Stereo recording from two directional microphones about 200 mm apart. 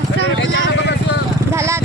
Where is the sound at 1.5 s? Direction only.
15° right (ahead or behind).